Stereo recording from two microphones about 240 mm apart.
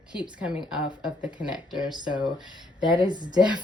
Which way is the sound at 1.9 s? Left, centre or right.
Centre.